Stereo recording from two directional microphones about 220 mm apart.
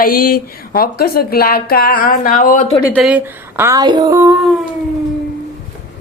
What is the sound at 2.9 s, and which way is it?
Speech, 5° right (ahead or behind).